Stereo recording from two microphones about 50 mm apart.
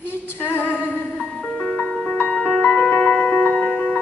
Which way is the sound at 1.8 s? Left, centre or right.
Left.